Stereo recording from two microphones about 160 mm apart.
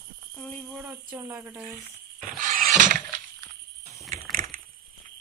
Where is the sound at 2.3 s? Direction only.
60° right (ahead or behind).